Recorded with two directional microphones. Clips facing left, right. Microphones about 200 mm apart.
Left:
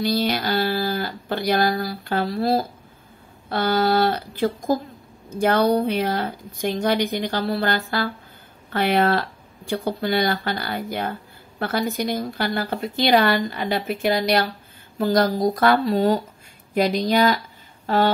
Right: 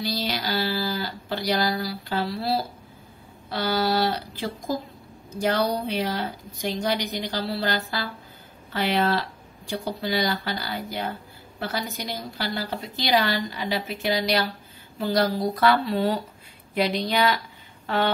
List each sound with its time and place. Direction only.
0.0 s a woman's voice: 55° left (ahead or behind)